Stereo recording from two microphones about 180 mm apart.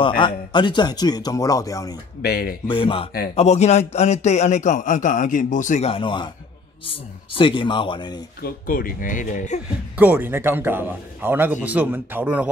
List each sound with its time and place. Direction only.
0.2 s speech: 25° left (ahead or behind)
2.2 s speech: 60° left (ahead or behind)
2.7 s a man's voice: 30° left (ahead or behind)
8.4 s speech: 50° left (ahead or behind)
9.9 s a man's voice: 10° right (ahead or behind)